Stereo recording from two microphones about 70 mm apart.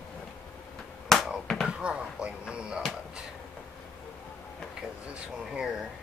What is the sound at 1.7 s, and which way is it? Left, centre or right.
Speech, centre.